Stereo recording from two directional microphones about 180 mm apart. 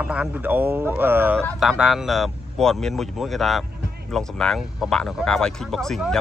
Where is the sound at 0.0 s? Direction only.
5° right (ahead or behind).